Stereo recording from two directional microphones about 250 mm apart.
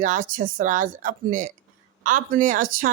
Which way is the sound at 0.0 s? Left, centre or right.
Right.